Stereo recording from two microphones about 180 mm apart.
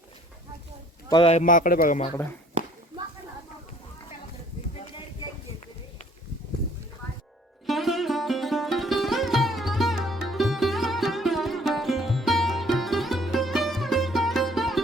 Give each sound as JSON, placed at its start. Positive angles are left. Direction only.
{"t": 1.1, "sound": "a man's voice", "side_deg": 35}
{"t": 7.7, "sound": "sitar", "side_deg": 0}